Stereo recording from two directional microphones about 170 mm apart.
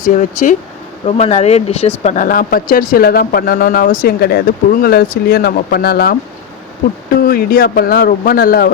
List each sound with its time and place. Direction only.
0.0 s speech: 50° left (ahead or behind)
1.0 s speech: 40° left (ahead or behind)
2.0 s speech: 50° left (ahead or behind); by 6.1 s 65° left (ahead or behind)
7.2 s speech: 60° left (ahead or behind)